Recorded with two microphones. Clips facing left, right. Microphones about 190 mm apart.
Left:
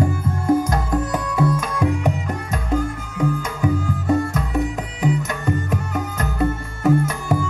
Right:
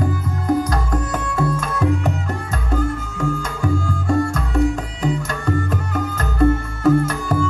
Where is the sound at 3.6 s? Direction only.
15° left (ahead or behind).